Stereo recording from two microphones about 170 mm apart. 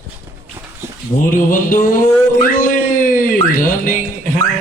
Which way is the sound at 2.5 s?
50° left (ahead or behind).